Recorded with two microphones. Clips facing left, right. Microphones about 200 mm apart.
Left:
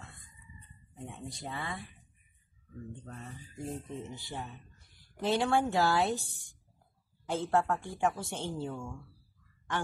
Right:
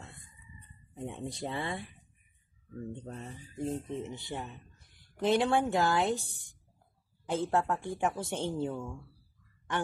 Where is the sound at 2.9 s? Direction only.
25° right (ahead or behind).